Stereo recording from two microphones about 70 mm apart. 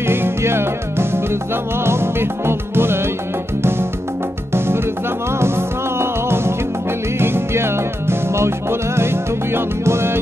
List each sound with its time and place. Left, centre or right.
0.0 s music: right
4.6 s music: right